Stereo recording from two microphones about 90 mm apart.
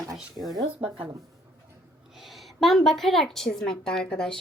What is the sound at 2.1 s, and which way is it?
A woman's voice, centre (ahead or behind).